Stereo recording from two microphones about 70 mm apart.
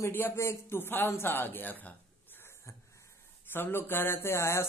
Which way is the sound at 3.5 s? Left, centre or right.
Left.